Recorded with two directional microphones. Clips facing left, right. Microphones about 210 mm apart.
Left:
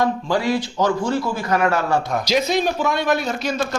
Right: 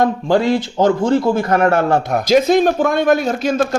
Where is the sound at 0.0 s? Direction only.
55° right (ahead or behind).